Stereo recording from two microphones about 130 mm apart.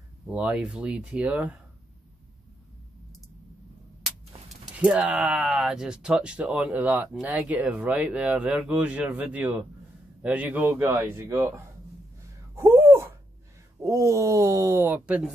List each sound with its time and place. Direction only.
0.3 s speech: 10° right (ahead or behind)
4.7 s speech: 10° right (ahead or behind)
12.5 s a sound: 20° right (ahead or behind)
13.8 s speech: 25° right (ahead or behind)